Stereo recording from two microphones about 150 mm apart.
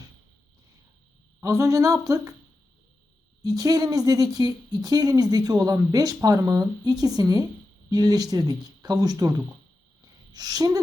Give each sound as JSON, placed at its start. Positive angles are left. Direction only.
{"t": 1.4, "sound": "speech", "side_deg": -20}
{"t": 3.4, "sound": "speech", "side_deg": -25}
{"t": 10.0, "sound": "a sound", "side_deg": -25}